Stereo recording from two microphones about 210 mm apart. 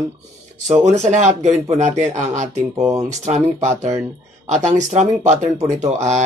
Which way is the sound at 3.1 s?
35° right (ahead or behind).